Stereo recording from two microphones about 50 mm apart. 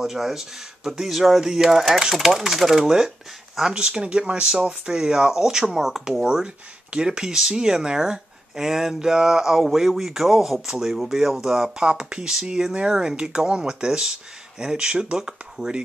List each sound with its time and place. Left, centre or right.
0.0 s speech: centre